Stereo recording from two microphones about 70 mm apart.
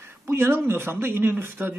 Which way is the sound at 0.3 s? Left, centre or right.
Right.